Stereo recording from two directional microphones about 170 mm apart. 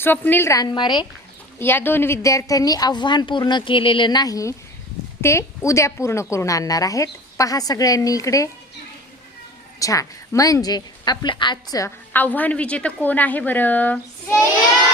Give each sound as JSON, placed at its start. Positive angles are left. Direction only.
{"t": 0.0, "sound": "a woman's voice", "side_deg": 10}
{"t": 1.5, "sound": "a woman's voice", "side_deg": 10}
{"t": 9.8, "sound": "a woman's voice", "side_deg": 20}